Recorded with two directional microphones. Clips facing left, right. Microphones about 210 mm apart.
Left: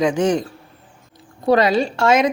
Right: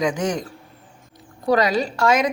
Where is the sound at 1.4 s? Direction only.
25° left (ahead or behind).